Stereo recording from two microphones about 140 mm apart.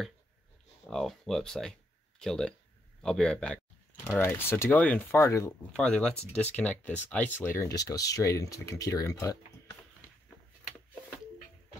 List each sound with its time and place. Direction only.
0.8 s a man's voice: centre (ahead or behind)
4.2 s speech: 15° left (ahead or behind)
5.7 s speech: 5° left (ahead or behind); by 9.4 s 25° left (ahead or behind)